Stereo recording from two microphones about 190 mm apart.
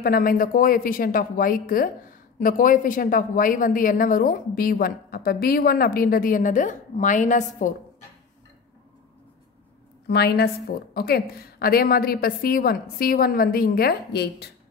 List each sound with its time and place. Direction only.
0.0 s a woman's voice: 50° left (ahead or behind)
10.0 s a woman's voice: 60° left (ahead or behind)